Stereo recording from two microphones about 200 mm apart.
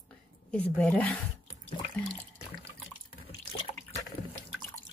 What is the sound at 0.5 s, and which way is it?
Speech, 5° left (ahead or behind).